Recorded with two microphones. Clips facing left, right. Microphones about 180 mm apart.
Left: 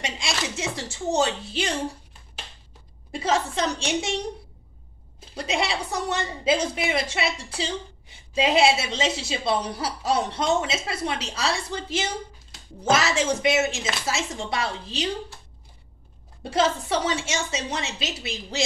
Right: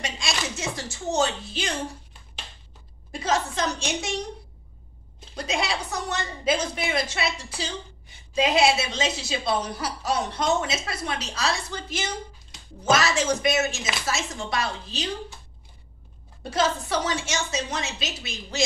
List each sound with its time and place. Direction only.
0.0 s chopping: 25° left (ahead or behind)
1.1 s a woman's voice: 30° left (ahead or behind)
3.1 s a woman's voice: 25° left (ahead or behind)
5.3 s a woman's voice: 30° left (ahead or behind)
16.4 s a woman's voice: 30° left (ahead or behind)